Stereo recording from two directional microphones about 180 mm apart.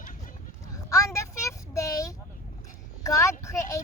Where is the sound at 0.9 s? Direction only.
15° left (ahead or behind).